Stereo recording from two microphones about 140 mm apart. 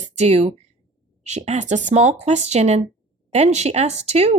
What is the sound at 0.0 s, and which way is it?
Speech, 50° right (ahead or behind).